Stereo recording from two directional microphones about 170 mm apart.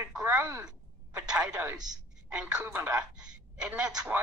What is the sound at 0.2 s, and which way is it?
A woman's voice, 15° right (ahead or behind).